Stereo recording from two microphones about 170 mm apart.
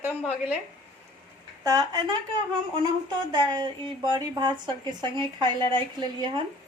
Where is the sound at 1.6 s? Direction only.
20° right (ahead or behind).